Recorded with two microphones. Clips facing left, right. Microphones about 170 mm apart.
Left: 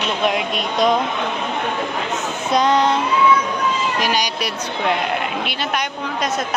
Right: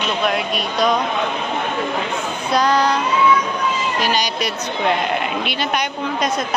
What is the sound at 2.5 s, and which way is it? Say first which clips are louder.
Speech: left 1 dB; 20° left (ahead or behind).